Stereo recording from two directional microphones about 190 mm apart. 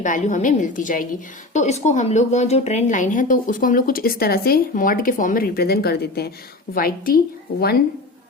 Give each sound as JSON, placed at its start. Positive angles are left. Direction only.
{"t": 0.0, "sound": "speech", "side_deg": 40}